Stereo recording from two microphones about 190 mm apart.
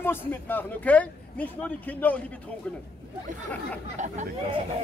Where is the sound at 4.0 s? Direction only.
40° right (ahead or behind).